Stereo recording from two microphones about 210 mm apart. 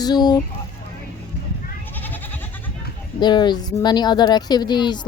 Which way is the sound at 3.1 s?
20° left (ahead or behind).